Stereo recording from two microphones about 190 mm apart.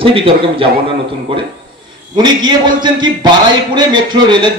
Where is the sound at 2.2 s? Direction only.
25° right (ahead or behind).